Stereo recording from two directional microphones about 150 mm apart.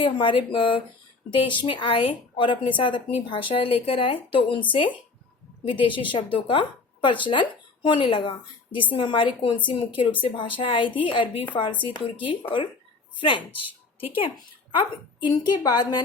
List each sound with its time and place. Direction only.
0.0 s speech: 35° left (ahead or behind)
13.5 s a sound: 10° right (ahead or behind)
14.8 s speech: 30° left (ahead or behind)